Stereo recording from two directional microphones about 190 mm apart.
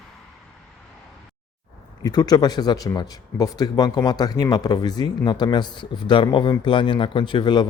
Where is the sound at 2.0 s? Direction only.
20° left (ahead or behind).